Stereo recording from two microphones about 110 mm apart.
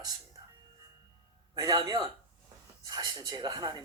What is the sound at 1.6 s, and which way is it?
Speech, 40° right (ahead or behind).